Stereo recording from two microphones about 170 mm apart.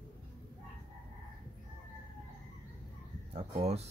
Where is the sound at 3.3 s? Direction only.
35° right (ahead or behind).